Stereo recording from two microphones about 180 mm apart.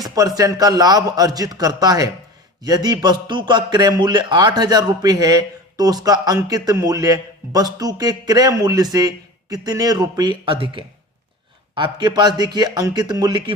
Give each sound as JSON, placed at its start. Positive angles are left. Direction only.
{"t": 0.0, "sound": "a man's voice", "side_deg": -20}